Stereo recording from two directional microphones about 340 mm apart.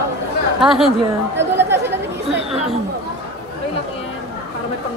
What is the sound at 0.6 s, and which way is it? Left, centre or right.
Speech, centre.